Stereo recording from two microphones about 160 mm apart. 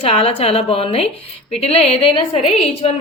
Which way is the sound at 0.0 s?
40° left (ahead or behind).